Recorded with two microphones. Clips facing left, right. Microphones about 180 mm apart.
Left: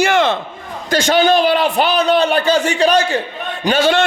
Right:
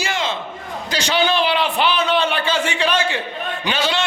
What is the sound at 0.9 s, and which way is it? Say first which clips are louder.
A man's voice: left 7 dB; 50° left (ahead or behind).